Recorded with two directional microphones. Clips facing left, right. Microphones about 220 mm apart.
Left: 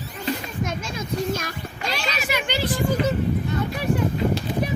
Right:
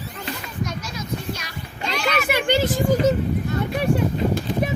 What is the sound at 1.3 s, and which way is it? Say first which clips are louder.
Speech: left 4 dB; 50° left (ahead or behind).